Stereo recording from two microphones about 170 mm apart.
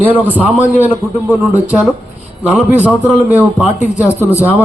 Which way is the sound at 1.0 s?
15° right (ahead or behind).